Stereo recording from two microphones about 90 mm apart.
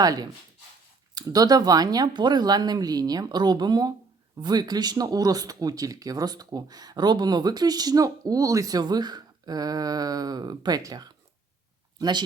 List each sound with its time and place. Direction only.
0.0 s speech: 45° right (ahead or behind)